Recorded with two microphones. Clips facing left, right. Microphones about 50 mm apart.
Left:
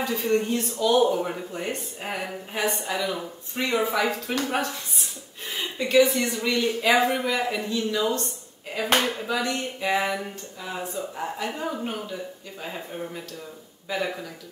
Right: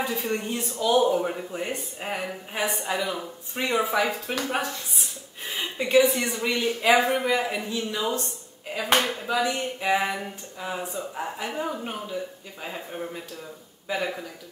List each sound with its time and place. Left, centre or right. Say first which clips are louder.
0.3 s speech: left 5 dB; centre
5.6 s speech: even; centre
9.2 s speech: right 1 dB; centre